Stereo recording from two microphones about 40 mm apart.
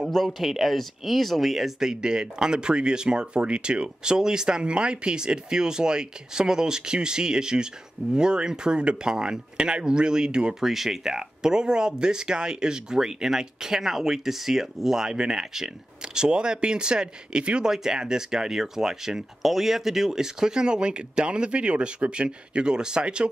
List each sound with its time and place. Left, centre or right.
0.1 s speech: centre
10.6 s speech: centre; by 23.3 s right